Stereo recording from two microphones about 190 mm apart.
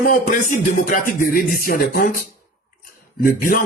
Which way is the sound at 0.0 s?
50° left (ahead or behind).